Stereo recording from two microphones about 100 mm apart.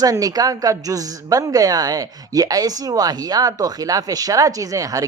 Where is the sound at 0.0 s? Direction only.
35° right (ahead or behind).